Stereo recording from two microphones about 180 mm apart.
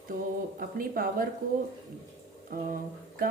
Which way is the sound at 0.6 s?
50° right (ahead or behind).